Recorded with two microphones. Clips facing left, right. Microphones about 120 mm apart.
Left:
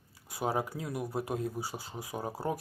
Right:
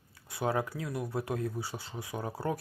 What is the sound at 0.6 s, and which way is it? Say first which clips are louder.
Speech: even; 20° left (ahead or behind).